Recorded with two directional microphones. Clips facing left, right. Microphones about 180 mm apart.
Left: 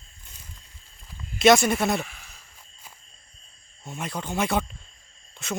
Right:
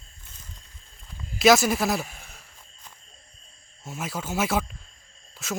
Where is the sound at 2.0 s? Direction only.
45° right (ahead or behind).